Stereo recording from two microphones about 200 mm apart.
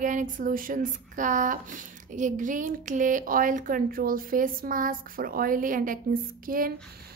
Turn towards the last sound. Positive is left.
turn(degrees=-45)  # may be behind; listen again after turning